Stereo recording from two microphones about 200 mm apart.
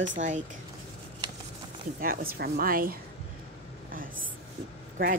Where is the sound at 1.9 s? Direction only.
45° right (ahead or behind).